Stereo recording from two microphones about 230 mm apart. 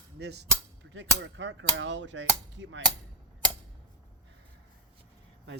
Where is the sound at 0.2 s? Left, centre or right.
Right.